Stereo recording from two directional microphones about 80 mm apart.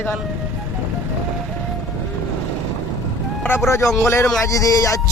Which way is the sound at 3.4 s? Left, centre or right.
Left.